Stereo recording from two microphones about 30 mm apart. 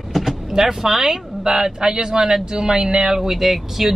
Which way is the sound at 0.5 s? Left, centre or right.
Centre.